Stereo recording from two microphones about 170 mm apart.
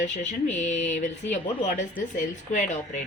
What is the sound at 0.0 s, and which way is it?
A woman's voice, 45° left (ahead or behind).